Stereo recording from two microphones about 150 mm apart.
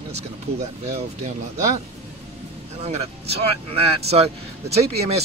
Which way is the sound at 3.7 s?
45° right (ahead or behind).